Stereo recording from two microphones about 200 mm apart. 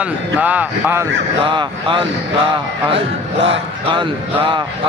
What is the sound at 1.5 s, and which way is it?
Speech, 25° right (ahead or behind).